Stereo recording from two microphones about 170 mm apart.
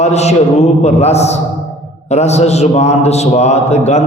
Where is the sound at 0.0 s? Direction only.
40° left (ahead or behind).